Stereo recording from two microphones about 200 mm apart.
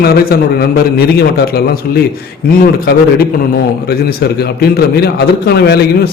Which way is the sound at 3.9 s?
50° left (ahead or behind).